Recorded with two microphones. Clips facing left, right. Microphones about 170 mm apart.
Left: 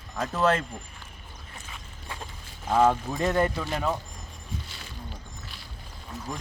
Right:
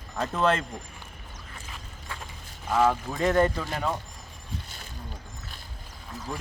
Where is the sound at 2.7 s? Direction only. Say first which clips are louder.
Left 2 dB; 15° left (ahead or behind).